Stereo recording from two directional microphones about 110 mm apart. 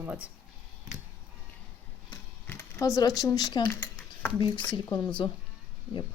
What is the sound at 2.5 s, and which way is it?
Speech, 25° left (ahead or behind).